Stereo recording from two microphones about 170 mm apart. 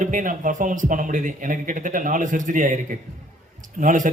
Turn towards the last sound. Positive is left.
turn(degrees=-50)  # may be behind; listen again after turning